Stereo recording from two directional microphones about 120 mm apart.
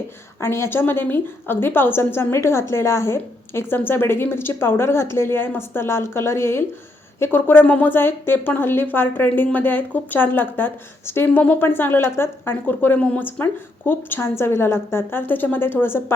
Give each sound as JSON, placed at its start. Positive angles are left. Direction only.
{"t": 0.3, "sound": "a woman's voice", "side_deg": 20}